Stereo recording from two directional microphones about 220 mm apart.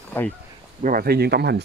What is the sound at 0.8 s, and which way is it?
Speech, 40° right (ahead or behind).